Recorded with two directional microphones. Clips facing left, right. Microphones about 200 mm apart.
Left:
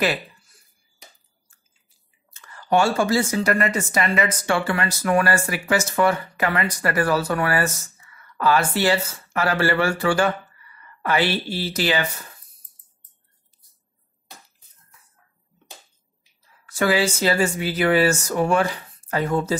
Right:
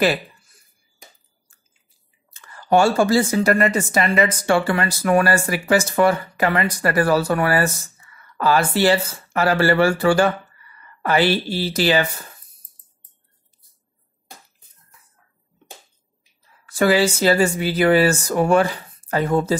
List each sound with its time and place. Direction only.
2.7 s speech: 35° right (ahead or behind)
16.7 s speech: 35° right (ahead or behind)